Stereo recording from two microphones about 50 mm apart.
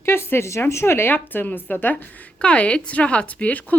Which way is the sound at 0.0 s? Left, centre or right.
Left.